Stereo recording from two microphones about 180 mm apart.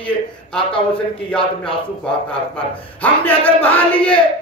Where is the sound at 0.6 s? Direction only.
30° left (ahead or behind).